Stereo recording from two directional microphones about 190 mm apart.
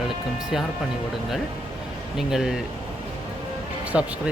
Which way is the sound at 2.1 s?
5° right (ahead or behind).